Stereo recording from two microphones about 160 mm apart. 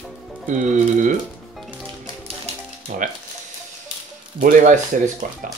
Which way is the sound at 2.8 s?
55° right (ahead or behind).